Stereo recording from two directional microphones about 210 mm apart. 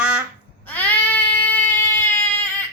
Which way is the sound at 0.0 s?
5° right (ahead or behind).